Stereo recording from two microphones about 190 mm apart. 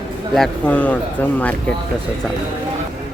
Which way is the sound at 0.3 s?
5° left (ahead or behind).